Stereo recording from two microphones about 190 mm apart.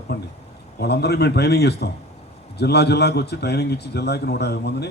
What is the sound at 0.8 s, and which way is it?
A man's voice, 60° left (ahead or behind).